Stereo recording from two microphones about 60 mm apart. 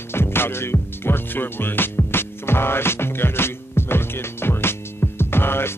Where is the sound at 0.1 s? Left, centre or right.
Left.